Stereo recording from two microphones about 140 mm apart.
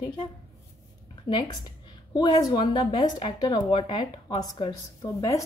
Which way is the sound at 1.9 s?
30° left (ahead or behind).